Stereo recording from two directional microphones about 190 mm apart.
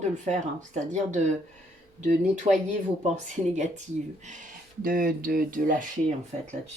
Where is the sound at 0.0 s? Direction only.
40° right (ahead or behind).